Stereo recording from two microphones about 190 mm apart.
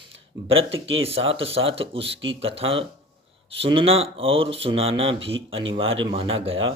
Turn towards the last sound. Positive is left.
turn(degrees=-30)  # may be behind; listen again after turning